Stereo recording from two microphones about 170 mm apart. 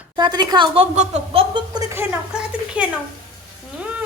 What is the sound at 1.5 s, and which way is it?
A woman's voice, 25° right (ahead or behind).